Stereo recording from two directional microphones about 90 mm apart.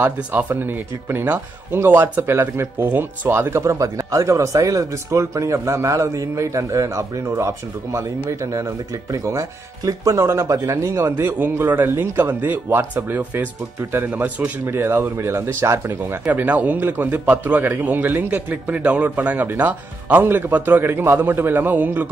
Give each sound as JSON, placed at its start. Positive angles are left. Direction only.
{"t": 0.0, "sound": "speech", "side_deg": -20}
{"t": 14.6, "sound": "speech", "side_deg": -30}